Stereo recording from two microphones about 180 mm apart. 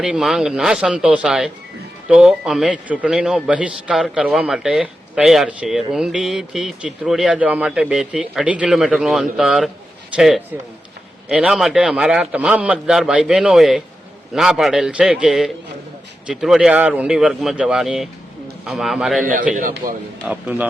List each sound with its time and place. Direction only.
0.0 s a man's voice: 5° right (ahead or behind)
19.2 s a man's voice: 50° right (ahead or behind)
20.2 s a man's voice: 10° right (ahead or behind)